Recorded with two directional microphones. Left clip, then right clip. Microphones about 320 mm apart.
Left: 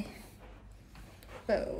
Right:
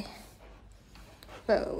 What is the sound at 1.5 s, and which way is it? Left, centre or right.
Speech, centre.